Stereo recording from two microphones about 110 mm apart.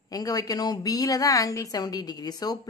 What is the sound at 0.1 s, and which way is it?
Speech, 35° left (ahead or behind).